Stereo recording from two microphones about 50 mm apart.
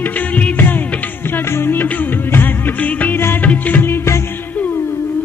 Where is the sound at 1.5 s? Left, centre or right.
Left.